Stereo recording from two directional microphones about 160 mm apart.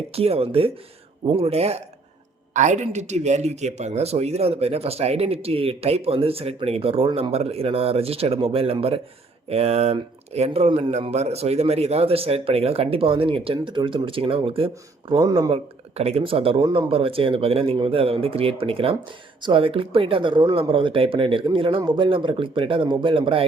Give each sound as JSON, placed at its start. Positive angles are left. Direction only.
{"t": 0.1, "sound": "speech", "side_deg": -40}